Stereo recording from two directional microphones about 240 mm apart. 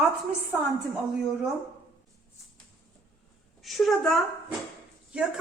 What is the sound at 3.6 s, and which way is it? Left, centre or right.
Speech, centre.